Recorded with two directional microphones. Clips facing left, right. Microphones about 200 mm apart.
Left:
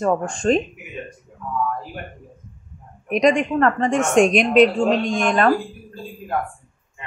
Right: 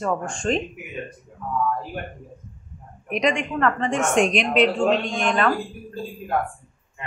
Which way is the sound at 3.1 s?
40° left (ahead or behind).